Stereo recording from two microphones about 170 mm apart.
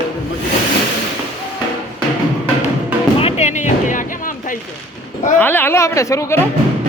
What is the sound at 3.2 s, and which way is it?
Speech, 35° left (ahead or behind).